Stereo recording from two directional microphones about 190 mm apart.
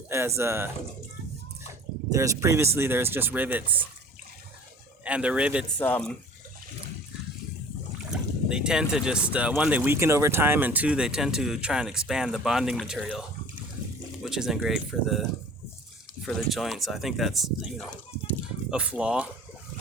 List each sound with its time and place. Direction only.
0.1 s speech: 15° right (ahead or behind)
2.1 s speech: 15° right (ahead or behind)
5.0 s speech: 5° right (ahead or behind)
5.8 s speech: 5° left (ahead or behind)
8.1 s speech: 5° right (ahead or behind)
16.2 s speech: centre (ahead or behind)